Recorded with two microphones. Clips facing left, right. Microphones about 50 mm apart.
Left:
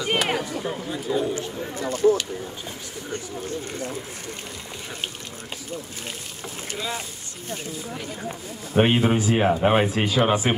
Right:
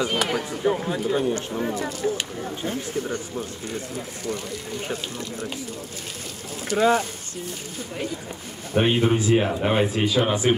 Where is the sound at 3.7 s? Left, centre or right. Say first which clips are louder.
Even; left.